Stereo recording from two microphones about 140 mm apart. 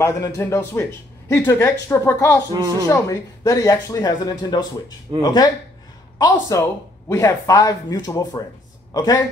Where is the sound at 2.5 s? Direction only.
30° right (ahead or behind).